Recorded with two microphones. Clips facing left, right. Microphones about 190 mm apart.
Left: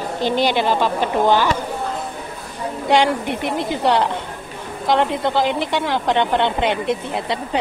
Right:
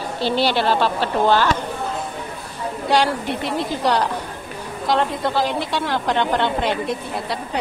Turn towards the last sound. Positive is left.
turn(degrees=20)  # may be behind; listen again after turning